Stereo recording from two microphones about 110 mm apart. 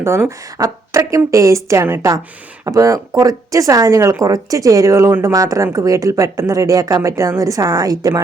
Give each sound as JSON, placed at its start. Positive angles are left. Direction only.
{"t": 0.0, "sound": "a woman's voice", "side_deg": -25}